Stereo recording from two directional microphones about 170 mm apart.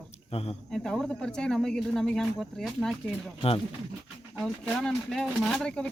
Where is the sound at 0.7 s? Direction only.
5° left (ahead or behind).